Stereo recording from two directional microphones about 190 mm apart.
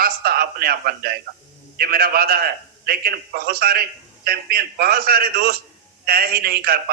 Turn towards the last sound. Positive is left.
turn(degrees=-55)  # may be behind; listen again after turning